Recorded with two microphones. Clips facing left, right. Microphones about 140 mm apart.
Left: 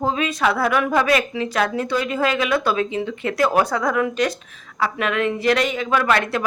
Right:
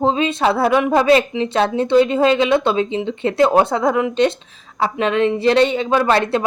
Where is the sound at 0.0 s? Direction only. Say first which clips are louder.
Right 4 dB; 25° right (ahead or behind).